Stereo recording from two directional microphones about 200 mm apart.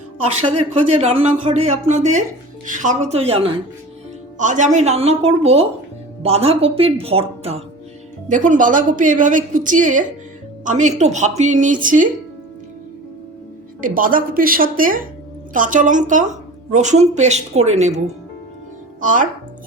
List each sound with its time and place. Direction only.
0.4 s a woman's voice: 30° right (ahead or behind)
13.8 s a woman's voice: 45° right (ahead or behind)